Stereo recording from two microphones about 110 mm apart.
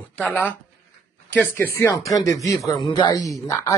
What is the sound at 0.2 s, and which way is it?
Speech, 15° left (ahead or behind).